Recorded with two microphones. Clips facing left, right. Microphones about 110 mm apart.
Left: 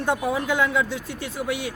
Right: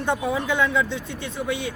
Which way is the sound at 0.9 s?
25° right (ahead or behind).